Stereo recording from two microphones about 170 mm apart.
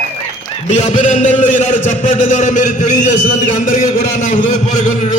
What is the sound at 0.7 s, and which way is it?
A man's voice, 45° left (ahead or behind).